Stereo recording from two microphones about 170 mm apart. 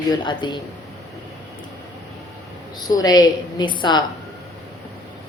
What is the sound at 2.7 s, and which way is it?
A woman's voice, 20° left (ahead or behind).